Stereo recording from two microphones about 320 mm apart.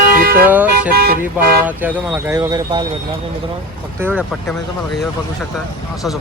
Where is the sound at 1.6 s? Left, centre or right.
Centre.